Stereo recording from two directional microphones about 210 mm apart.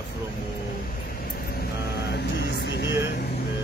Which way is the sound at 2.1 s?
50° left (ahead or behind).